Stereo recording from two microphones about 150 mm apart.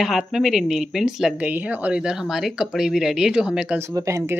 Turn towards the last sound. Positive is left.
turn(degrees=-20)  # may be behind; listen again after turning